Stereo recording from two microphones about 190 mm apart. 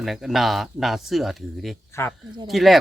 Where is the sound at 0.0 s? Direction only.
Centre (ahead or behind).